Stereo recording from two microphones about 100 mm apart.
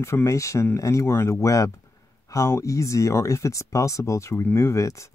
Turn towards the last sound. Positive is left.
turn(degrees=30)  # may be behind; listen again after turning